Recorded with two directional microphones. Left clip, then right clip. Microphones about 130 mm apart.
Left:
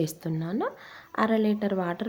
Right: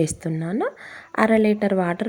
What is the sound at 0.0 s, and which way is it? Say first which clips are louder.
Speech: right 6 dB; 30° right (ahead or behind).